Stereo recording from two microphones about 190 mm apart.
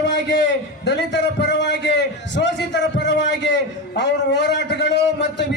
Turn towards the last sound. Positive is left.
turn(degrees=65)  # may be behind; listen again after turning